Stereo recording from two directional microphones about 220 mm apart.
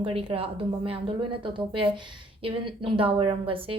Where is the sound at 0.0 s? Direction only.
25° right (ahead or behind).